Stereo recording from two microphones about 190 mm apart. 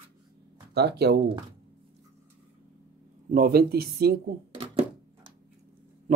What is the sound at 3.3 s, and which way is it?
Speech, 50° right (ahead or behind).